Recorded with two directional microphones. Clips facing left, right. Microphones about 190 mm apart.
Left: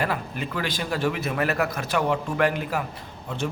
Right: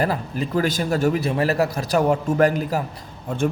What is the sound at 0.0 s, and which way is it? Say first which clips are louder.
A man's voice: right 4 dB; 35° right (ahead or behind).